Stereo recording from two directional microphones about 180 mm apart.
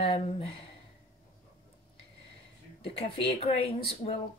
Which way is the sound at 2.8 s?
30° left (ahead or behind).